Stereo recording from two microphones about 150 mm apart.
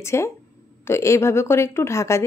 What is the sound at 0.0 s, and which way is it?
Speech, 20° left (ahead or behind).